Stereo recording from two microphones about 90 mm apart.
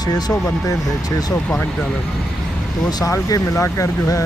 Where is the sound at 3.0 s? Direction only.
40° left (ahead or behind).